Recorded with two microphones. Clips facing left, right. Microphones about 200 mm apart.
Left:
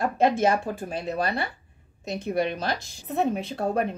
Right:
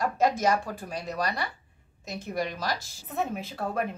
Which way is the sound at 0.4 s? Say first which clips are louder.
Left 3 dB; 25° left (ahead or behind).